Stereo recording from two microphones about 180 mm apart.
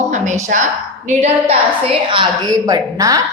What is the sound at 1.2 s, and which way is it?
A woman's voice, 30° right (ahead or behind).